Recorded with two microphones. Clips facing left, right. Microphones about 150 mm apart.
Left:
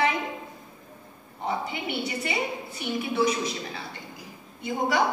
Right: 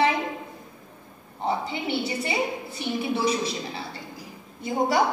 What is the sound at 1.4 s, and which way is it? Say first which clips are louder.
A woman's voice: right 3 dB; 30° right (ahead or behind).